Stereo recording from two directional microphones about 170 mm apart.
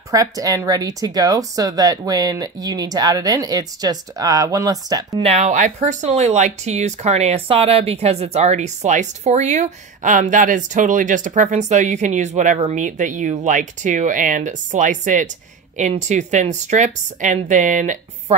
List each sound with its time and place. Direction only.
0.1 s speech: 20° right (ahead or behind)
5.2 s speech: 45° right (ahead or behind)